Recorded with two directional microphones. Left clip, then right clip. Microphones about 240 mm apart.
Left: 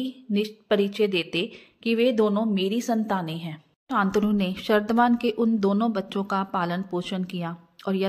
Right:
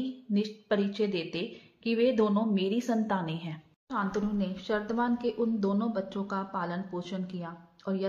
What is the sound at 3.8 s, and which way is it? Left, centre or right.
A woman's voice, left.